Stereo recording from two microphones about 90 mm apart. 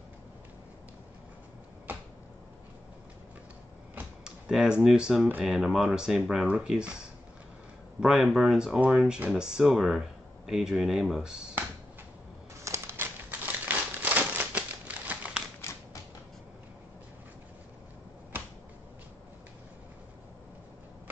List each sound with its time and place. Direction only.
4.2 s speech: 5° right (ahead or behind)
8.0 s speech: 5° right (ahead or behind)
12.6 s crumpling: 30° right (ahead or behind); by 15.4 s 15° right (ahead or behind)
15.6 s a sound: 30° left (ahead or behind)